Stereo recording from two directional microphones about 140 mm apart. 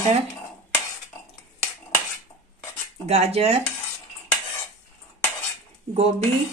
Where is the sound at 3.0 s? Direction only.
50° right (ahead or behind).